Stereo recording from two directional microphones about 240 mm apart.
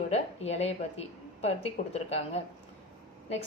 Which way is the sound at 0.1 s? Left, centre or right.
Left.